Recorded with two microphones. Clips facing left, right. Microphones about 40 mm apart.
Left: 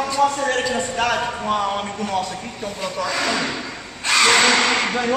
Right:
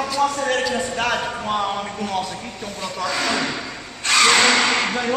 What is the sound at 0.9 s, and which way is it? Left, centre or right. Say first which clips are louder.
Speech: left 4 dB; right.